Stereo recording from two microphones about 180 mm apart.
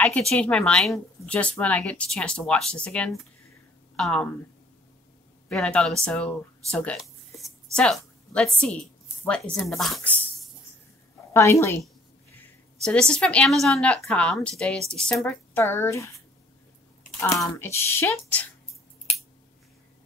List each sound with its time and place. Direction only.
0.0 s a woman's voice: 5° left (ahead or behind)
5.5 s a woman's voice: 5° left (ahead or behind)
6.7 s a sound: 5° left (ahead or behind)
8.5 s a woman's voice: 5° left (ahead or behind)
11.3 s speech: 15° left (ahead or behind)
12.8 s a woman's voice: 5° left (ahead or behind)
17.2 s speech: 15° left (ahead or behind)